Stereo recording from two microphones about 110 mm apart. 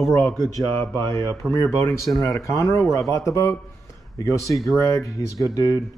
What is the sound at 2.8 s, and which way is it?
Speech, centre (ahead or behind).